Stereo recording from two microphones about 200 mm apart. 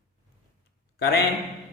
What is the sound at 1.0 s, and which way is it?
Speech, 55° left (ahead or behind).